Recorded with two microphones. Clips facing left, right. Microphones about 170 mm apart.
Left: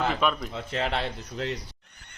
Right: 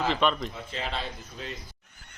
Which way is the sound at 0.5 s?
65° left (ahead or behind).